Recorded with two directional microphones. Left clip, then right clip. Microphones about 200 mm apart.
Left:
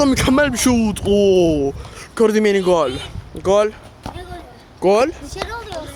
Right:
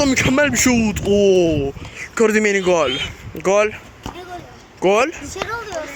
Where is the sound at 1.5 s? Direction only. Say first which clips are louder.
Left 2 dB; 40° left (ahead or behind).